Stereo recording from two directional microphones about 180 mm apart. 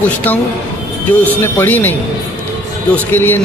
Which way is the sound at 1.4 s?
10° left (ahead or behind).